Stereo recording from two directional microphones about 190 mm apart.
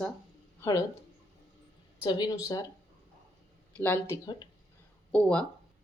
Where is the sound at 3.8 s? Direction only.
10° left (ahead or behind).